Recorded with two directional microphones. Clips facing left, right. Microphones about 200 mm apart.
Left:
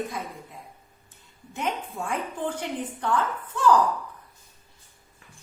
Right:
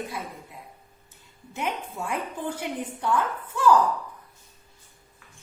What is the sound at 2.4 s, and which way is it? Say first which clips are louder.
A woman's voice: left 1 dB; 10° right (ahead or behind).